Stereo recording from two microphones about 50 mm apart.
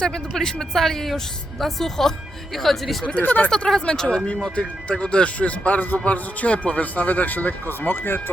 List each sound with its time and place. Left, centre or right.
0.0 s a woman's voice: centre
3.2 s speech: left
3.5 s a woman's voice: centre; by 8.2 s left